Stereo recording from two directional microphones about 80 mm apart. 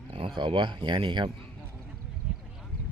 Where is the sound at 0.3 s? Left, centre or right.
Right.